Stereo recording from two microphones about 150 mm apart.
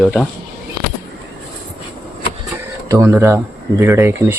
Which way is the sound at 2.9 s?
15° right (ahead or behind).